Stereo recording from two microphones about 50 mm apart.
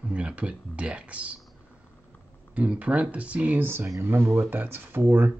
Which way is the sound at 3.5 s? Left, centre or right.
Right.